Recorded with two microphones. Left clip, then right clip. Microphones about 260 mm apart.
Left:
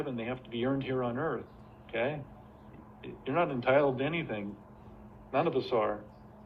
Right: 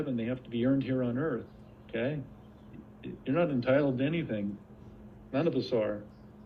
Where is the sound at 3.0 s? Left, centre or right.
Right.